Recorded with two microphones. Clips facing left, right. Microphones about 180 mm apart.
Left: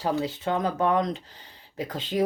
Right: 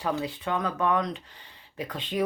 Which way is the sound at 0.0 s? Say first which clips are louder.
Left 3 dB; 25° left (ahead or behind).